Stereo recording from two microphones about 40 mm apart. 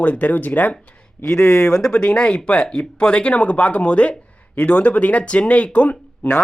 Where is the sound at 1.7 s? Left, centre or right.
Centre.